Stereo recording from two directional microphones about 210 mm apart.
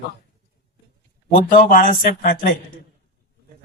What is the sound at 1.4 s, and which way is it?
Speech, 40° left (ahead or behind).